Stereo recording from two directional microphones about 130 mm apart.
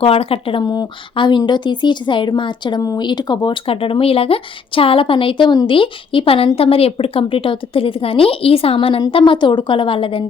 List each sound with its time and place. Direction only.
0.0 s speech: 45° left (ahead or behind)